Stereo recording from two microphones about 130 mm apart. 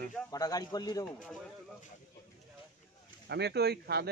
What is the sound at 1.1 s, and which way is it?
Speech, 5° left (ahead or behind).